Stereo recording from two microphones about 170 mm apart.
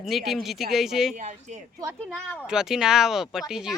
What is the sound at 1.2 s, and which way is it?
Speech, 45° right (ahead or behind).